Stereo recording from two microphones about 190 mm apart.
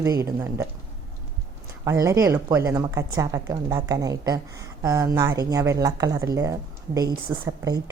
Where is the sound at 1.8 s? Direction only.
15° right (ahead or behind).